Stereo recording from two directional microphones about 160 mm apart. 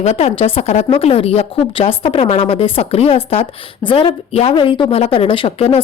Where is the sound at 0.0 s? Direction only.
45° left (ahead or behind).